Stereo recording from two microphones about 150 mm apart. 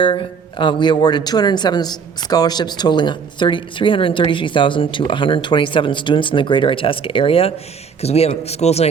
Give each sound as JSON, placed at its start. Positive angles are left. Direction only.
{"t": 0.0, "sound": "speech", "side_deg": 35}